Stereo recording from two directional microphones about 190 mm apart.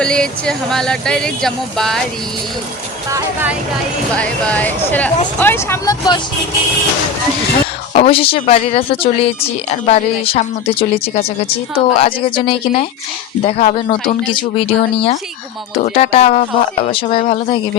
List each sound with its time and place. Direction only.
0.0 s speech: 5° left (ahead or behind)
4.1 s speech: 5° left (ahead or behind)
7.9 s speech: 30° left (ahead or behind)